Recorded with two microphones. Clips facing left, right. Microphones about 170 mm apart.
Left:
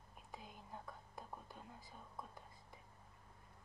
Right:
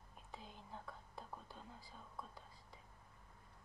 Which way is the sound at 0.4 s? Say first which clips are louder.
Even; 10° left (ahead or behind).